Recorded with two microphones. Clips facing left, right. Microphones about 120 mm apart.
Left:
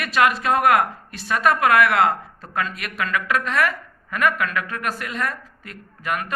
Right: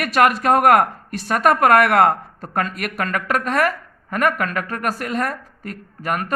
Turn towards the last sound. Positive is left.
turn(degrees=-45)  # may be behind; listen again after turning